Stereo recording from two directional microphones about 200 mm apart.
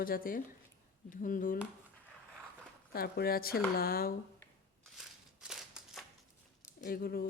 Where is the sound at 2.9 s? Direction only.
50° left (ahead or behind).